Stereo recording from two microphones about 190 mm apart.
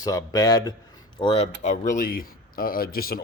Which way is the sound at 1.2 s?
30° left (ahead or behind).